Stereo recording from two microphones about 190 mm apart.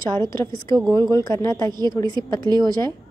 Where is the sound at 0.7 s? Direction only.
20° right (ahead or behind).